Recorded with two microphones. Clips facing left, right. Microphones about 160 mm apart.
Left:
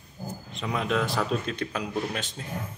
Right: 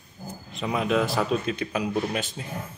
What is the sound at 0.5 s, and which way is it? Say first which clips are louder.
A man's voice: right 3 dB; 5° right (ahead or behind).